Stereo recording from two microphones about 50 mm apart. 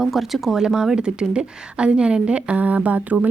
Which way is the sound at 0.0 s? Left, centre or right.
Centre.